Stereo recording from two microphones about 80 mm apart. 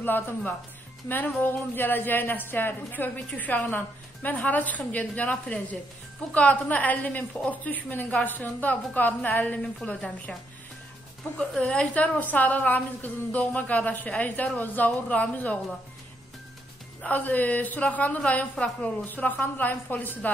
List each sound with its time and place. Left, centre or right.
1.0 s a woman's voice: left
11.3 s a woman's voice: centre
17.0 s a woman's voice: left